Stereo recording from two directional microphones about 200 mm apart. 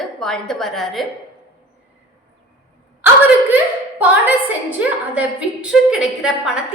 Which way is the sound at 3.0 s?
10° right (ahead or behind).